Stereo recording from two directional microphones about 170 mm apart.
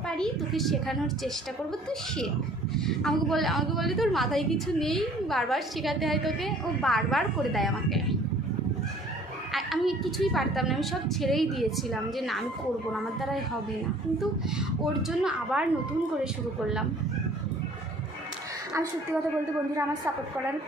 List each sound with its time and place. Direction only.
0.2 s a woman's voice: centre (ahead or behind)
2.8 s a woman's voice: 5° left (ahead or behind)
9.5 s a woman's voice: centre (ahead or behind)
14.6 s a woman's voice: centre (ahead or behind)
19.7 s a woman's voice: 20° right (ahead or behind)